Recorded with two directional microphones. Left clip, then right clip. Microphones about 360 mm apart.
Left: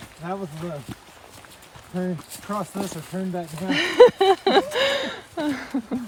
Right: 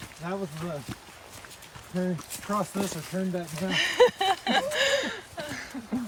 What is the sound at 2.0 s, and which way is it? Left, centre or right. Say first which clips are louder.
Speech: left 2 dB; centre.